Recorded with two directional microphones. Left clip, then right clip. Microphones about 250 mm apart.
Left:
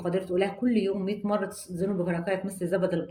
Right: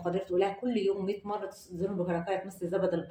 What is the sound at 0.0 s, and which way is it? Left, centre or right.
Speech, left.